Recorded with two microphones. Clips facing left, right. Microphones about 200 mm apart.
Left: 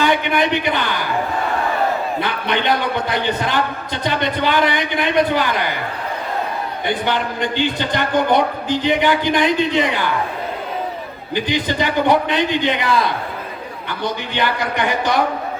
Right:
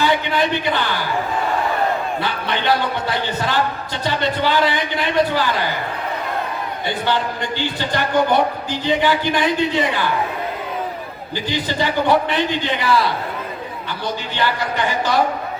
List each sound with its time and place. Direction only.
0.0 s a man's voice: 20° left (ahead or behind)
3.2 s a man's voice: 20° left (ahead or behind)
6.8 s a man's voice: 20° left (ahead or behind)
11.3 s a man's voice: 20° left (ahead or behind)